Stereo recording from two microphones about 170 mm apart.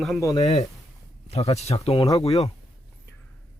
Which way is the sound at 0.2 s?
20° left (ahead or behind).